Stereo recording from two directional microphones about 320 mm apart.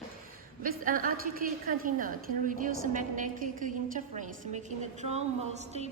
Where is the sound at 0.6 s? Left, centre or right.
Right.